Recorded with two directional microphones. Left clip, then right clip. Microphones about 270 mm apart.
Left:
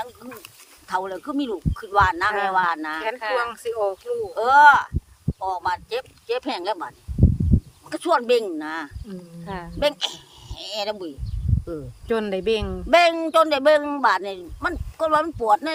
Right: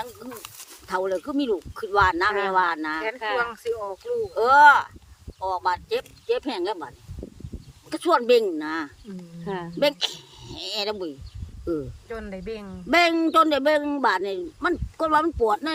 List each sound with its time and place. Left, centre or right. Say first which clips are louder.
0.2 s a sound: right 1 dB; centre
0.9 s a man's voice: right 1 dB; centre
3.3 s speech: even; left
3.9 s a man's voice: even; centre
12.0 s speech: left 11 dB; left
12.9 s a man's voice: left 3 dB; centre